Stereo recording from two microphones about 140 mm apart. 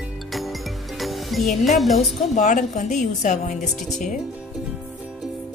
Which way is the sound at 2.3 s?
60° left (ahead or behind).